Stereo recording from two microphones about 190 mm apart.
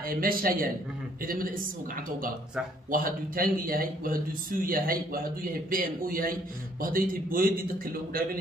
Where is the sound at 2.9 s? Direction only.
50° right (ahead or behind).